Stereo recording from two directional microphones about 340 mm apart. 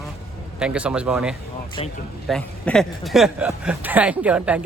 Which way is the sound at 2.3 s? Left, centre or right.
Centre.